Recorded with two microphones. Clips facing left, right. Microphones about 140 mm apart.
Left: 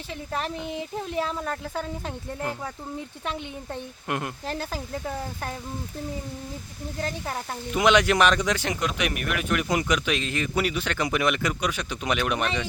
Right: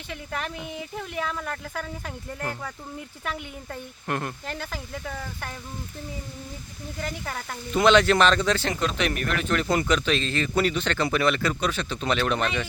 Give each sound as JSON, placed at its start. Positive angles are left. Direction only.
{"t": 0.1, "sound": "speech", "side_deg": 30}
{"t": 3.2, "sound": "speech", "side_deg": 25}
{"t": 4.0, "sound": "speech", "side_deg": 15}
{"t": 4.4, "sound": "speech", "side_deg": 35}
{"t": 7.0, "sound": "speech", "side_deg": 25}
{"t": 7.7, "sound": "speech", "side_deg": 15}